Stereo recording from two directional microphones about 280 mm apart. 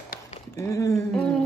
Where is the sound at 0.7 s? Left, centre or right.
Centre.